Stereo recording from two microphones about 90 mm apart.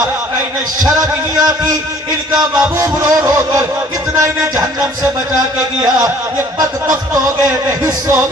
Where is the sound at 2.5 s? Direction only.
40° right (ahead or behind).